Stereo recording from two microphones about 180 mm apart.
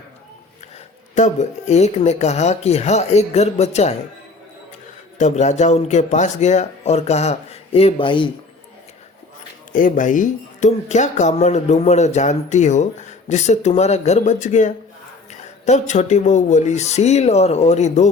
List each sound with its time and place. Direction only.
1.1 s speech: 40° left (ahead or behind)
5.1 s speech: 40° left (ahead or behind)
9.7 s speech: 45° left (ahead or behind)